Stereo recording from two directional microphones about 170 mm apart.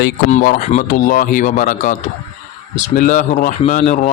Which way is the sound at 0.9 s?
55° left (ahead or behind).